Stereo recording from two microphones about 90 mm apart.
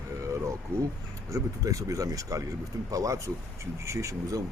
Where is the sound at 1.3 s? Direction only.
35° right (ahead or behind).